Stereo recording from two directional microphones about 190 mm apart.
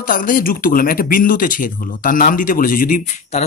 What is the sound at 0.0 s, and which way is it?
Speech, 45° left (ahead or behind).